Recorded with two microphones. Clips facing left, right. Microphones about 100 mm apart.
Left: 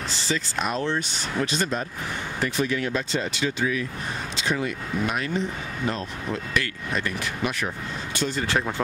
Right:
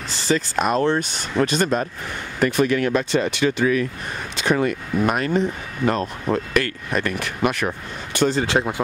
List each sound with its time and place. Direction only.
0.3 s speech: 50° right (ahead or behind)
8.3 s speech: 25° right (ahead or behind)